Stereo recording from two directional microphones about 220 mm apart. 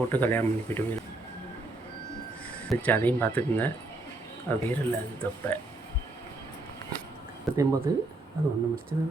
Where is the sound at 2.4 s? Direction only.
5° left (ahead or behind).